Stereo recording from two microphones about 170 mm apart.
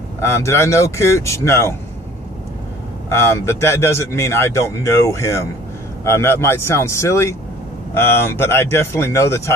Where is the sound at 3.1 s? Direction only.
15° left (ahead or behind).